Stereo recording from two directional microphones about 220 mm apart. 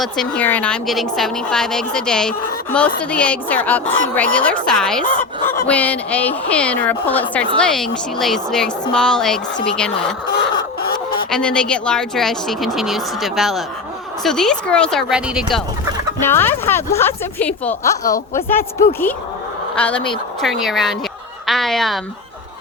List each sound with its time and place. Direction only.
0.0 s a woman's voice: 5° left (ahead or behind)
10.5 s chicken: 20° left (ahead or behind)
11.3 s a woman's voice: 5° left (ahead or behind)
16.2 s a woman's voice: 10° left (ahead or behind)